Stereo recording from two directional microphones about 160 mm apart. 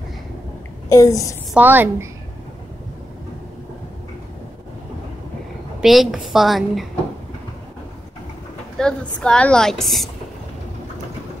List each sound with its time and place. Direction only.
0.8 s a child's voice: 20° left (ahead or behind)
1.5 s a woman's voice: 10° right (ahead or behind)
5.8 s a woman's voice: 5° right (ahead or behind)
8.7 s a woman's voice: 5° left (ahead or behind)